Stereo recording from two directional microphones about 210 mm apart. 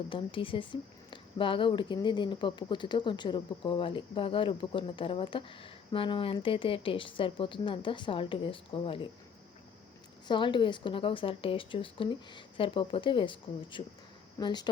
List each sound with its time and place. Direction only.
0.1 s speech: 25° left (ahead or behind)
10.2 s speech: 20° left (ahead or behind)